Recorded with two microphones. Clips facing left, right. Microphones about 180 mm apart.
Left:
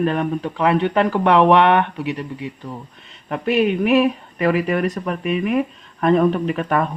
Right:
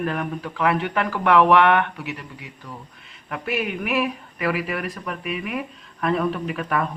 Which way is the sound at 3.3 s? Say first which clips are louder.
Left 8 dB; 35° left (ahead or behind).